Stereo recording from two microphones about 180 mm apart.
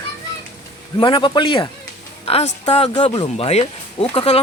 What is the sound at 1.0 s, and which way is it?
A man's voice, 25° left (ahead or behind).